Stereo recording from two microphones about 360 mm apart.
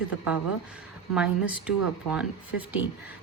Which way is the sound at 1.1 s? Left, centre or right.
Centre.